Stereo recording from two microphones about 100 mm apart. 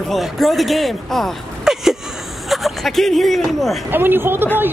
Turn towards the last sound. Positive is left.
turn(degrees=-20)  # may be behind; listen again after turning